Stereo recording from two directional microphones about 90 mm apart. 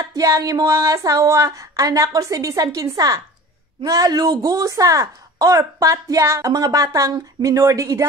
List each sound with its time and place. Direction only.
0.0 s speech: 40° right (ahead or behind)